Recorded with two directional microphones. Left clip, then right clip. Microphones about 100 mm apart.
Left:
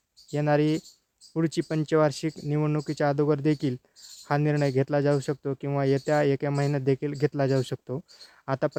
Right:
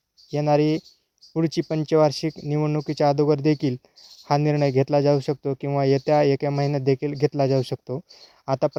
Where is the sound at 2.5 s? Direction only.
25° right (ahead or behind).